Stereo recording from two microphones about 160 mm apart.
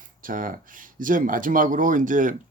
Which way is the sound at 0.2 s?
60° right (ahead or behind).